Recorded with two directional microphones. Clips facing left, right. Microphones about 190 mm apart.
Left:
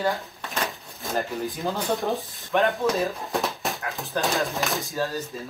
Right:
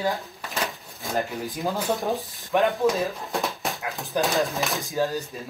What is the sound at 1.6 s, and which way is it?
Speech, centre (ahead or behind).